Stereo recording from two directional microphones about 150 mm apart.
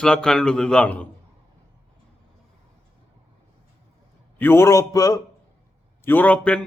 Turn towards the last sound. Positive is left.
turn(degrees=10)  # may be behind; listen again after turning